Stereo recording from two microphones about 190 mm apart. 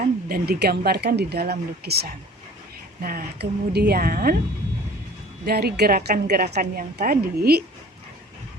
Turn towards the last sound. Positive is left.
turn(degrees=-55)  # may be behind; listen again after turning